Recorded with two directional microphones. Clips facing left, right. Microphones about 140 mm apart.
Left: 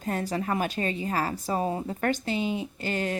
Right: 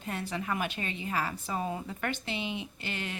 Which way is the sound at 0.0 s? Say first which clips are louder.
Left 6 dB; 40° left (ahead or behind).